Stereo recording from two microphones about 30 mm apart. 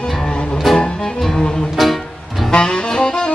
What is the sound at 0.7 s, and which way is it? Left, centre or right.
Music, left.